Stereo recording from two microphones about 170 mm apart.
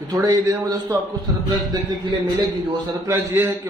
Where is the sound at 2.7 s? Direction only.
15° right (ahead or behind).